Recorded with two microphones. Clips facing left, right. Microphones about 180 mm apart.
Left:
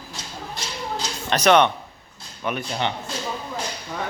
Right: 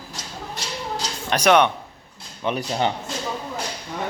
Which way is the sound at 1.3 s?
10° right (ahead or behind).